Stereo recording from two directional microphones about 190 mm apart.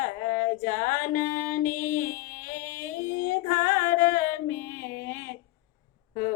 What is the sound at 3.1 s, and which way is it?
Female singing, 45° left (ahead or behind).